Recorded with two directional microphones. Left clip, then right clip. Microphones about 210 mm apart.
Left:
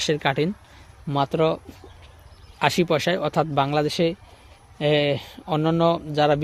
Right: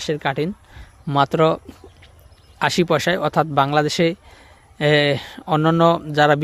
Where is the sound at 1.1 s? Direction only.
25° right (ahead or behind).